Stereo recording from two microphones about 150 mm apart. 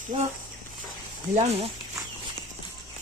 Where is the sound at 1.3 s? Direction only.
45° right (ahead or behind).